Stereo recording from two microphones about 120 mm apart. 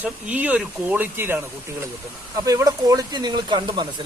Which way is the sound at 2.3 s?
30° right (ahead or behind).